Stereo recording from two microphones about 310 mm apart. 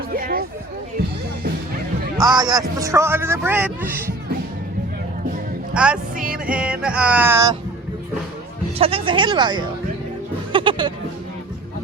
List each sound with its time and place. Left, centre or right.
0.1 s speech: right
2.1 s a man's voice: centre
5.7 s speech: centre
6.3 s music: centre
8.8 s a man's voice: centre